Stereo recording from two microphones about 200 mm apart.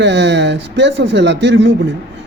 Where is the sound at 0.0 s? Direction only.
60° right (ahead or behind).